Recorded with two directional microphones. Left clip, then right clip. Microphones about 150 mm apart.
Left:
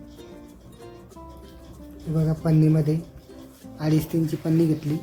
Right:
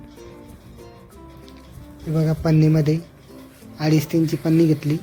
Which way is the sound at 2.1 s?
25° right (ahead or behind).